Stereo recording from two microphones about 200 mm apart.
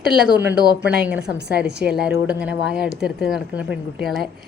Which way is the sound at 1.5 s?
55° right (ahead or behind).